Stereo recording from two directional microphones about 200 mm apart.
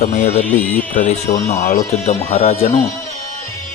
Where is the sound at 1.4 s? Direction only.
35° left (ahead or behind).